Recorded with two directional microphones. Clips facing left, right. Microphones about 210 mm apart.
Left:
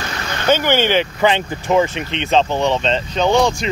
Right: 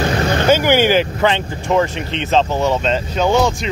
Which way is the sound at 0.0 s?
45° right (ahead or behind).